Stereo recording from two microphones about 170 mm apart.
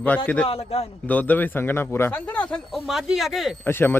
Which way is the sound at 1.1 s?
10° left (ahead or behind).